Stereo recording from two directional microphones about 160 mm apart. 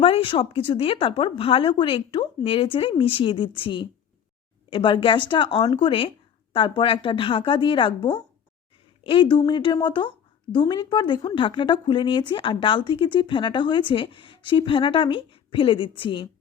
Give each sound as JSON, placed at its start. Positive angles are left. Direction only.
{"t": 0.0, "sound": "a woman's voice", "side_deg": 35}